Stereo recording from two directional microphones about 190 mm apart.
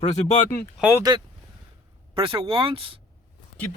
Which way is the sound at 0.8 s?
5° right (ahead or behind).